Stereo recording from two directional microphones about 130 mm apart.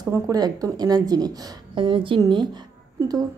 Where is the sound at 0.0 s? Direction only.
30° right (ahead or behind).